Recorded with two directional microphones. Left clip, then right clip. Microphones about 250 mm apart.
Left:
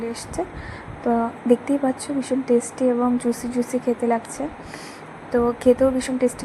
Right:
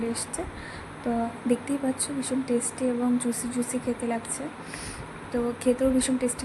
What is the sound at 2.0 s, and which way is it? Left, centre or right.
Speech, centre.